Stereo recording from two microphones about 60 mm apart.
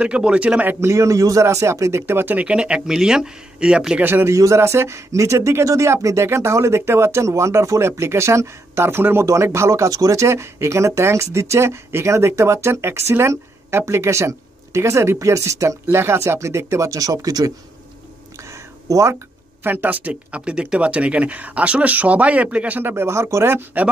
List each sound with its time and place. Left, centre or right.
0.0 s speech: centre
0.7 s speech: right
2.3 s speech: centre
4.0 s speech: right
4.3 s speech: right
9.2 s speech: right
18.5 s a sound: right
19.6 s speech: right
23.0 s speech: right